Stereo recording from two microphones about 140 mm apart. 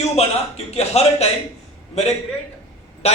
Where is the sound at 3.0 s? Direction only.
50° left (ahead or behind).